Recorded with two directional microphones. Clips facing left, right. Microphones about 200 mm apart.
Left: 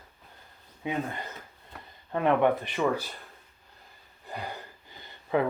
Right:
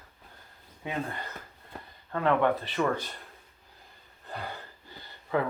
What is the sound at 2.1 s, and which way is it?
Speech, 15° left (ahead or behind).